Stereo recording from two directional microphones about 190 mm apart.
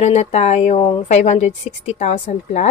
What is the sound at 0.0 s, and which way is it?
Speech, 35° left (ahead or behind).